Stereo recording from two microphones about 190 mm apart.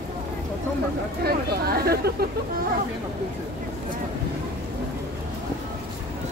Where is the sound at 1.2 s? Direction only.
55° right (ahead or behind).